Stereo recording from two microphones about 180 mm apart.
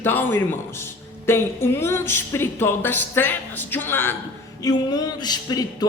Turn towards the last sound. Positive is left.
turn(degrees=20)  # may be behind; listen again after turning